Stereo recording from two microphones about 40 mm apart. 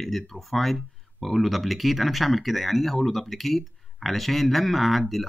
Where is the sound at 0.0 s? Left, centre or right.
Centre.